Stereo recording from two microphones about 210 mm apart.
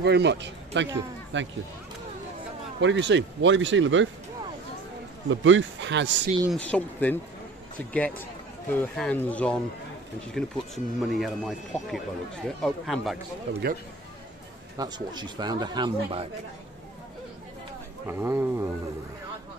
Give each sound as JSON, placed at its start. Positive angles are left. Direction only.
{"t": 0.0, "sound": "speech", "side_deg": -55}
{"t": 2.8, "sound": "speech", "side_deg": -60}
{"t": 5.3, "sound": "speech", "side_deg": -60}
{"t": 6.5, "sound": "speech", "side_deg": 5}
{"t": 13.5, "sound": "speech", "side_deg": -50}
{"t": 14.8, "sound": "a man's voice", "side_deg": -20}
{"t": 18.0, "sound": "speech", "side_deg": -10}